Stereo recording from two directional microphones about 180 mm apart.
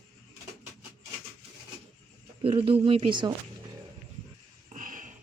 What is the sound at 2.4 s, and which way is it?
Speech, 30° right (ahead or behind).